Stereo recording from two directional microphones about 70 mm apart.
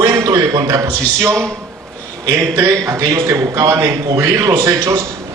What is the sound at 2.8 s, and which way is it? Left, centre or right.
A man's voice, right.